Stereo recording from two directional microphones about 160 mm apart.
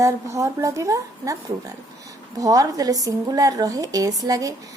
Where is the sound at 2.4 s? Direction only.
20° right (ahead or behind).